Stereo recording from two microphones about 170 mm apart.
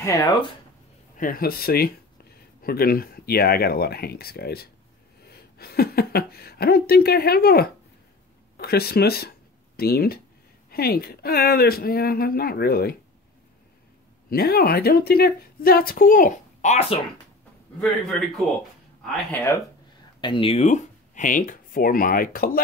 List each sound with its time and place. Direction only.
0.0 s speech: 20° left (ahead or behind)
1.1 s a woman's voice: 55° left (ahead or behind)
14.3 s a woman's voice: 65° left (ahead or behind); by 16.8 s 45° left (ahead or behind)
17.7 s a man's voice: centre (ahead or behind)
19.3 s speech: 15° left (ahead or behind)
20.2 s speech: 30° left (ahead or behind)
20.6 s speech: 45° left (ahead or behind)